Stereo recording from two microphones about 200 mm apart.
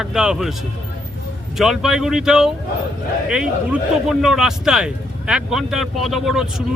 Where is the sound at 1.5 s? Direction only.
Centre (ahead or behind).